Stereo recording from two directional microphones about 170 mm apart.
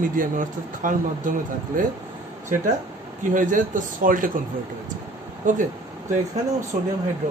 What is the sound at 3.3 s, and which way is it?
Speech, 50° right (ahead or behind).